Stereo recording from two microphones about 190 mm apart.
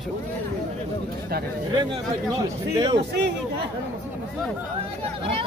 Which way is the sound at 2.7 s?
25° right (ahead or behind).